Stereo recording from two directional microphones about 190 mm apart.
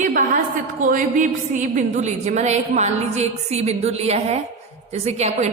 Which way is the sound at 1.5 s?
40° right (ahead or behind).